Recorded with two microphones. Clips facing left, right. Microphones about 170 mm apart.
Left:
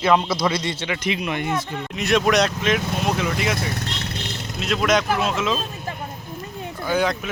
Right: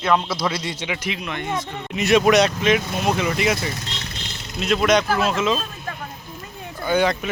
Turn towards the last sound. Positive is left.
turn(degrees=0)  # may be behind; listen again after turning